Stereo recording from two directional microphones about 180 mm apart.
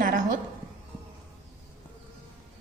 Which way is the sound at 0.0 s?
45° right (ahead or behind).